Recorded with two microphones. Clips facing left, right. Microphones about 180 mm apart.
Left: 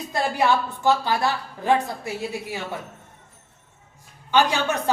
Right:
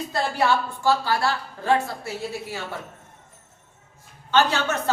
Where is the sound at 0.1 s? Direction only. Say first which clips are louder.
Left 2 dB; 15° left (ahead or behind).